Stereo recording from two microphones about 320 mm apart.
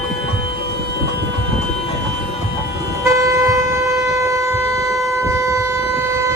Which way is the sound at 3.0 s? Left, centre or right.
Centre.